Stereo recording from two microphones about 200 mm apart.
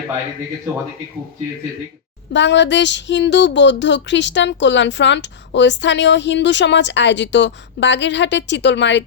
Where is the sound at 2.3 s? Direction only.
60° left (ahead or behind).